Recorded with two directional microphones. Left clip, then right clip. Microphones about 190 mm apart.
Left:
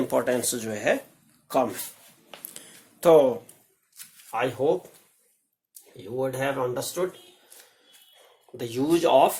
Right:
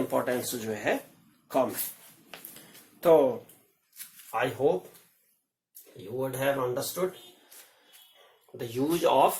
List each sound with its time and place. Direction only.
0.1 s speech: 55° left (ahead or behind)
2.3 s a sound: 10° left (ahead or behind)
3.0 s speech: 60° left (ahead or behind)
4.3 s speech: 45° left (ahead or behind)
6.1 s speech: 45° left (ahead or behind)
8.5 s speech: 55° left (ahead or behind)